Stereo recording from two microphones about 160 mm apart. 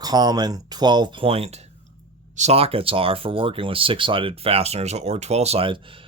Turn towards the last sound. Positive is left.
turn(degrees=-35)  # may be behind; listen again after turning